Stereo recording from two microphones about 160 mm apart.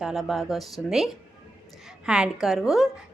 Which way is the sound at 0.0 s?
5° right (ahead or behind).